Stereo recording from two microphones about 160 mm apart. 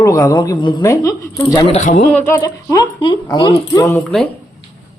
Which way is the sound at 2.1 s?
15° left (ahead or behind).